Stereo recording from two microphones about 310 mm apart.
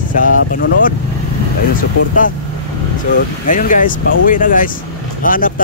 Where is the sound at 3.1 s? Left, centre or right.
Left.